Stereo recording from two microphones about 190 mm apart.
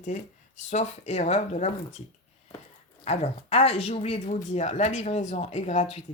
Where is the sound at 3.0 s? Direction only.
35° left (ahead or behind).